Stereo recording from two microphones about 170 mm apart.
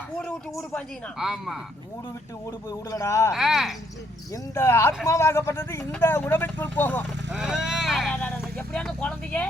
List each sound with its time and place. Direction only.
0.5 s speech: 15° left (ahead or behind)
1.2 s speech: centre (ahead or behind)
2.9 s speech: 15° left (ahead or behind)
3.3 s speech: centre (ahead or behind)
4.5 s speech: 15° left (ahead or behind)
7.3 s speech: 5° right (ahead or behind)